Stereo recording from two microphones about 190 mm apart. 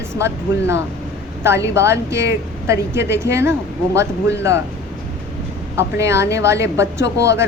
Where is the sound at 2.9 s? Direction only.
65° left (ahead or behind).